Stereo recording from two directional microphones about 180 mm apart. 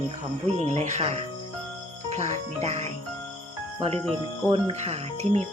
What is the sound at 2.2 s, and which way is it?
Speech, 40° right (ahead or behind).